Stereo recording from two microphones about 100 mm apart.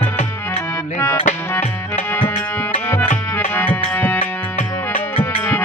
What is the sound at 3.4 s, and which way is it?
Music, 20° left (ahead or behind).